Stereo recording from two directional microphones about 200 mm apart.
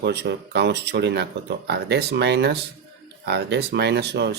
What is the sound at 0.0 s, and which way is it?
Speech, 55° right (ahead or behind).